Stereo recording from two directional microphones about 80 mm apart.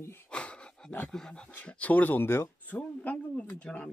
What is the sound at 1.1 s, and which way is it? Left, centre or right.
Speech, centre.